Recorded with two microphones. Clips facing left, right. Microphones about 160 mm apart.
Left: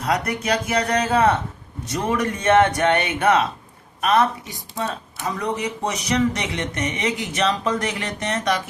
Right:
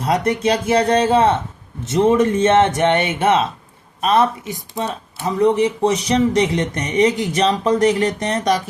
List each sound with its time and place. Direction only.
0.0 s speech: 30° right (ahead or behind)